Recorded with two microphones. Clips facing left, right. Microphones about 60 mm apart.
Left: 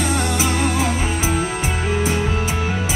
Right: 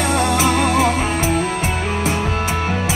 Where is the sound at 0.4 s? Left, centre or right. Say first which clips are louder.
Right 4 dB; right.